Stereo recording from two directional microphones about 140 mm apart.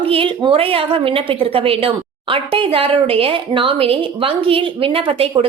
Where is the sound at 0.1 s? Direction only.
40° right (ahead or behind).